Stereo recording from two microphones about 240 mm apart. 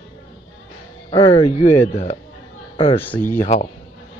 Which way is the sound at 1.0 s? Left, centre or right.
Left.